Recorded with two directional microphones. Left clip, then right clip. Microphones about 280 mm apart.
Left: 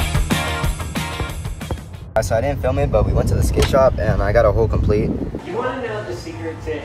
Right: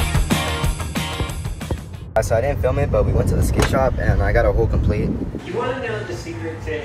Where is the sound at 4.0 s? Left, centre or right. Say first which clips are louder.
Left 3 dB; centre.